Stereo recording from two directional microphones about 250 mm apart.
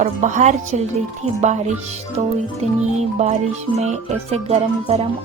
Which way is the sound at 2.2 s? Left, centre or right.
Right.